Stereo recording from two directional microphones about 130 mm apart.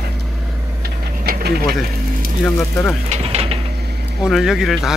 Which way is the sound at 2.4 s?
5° left (ahead or behind).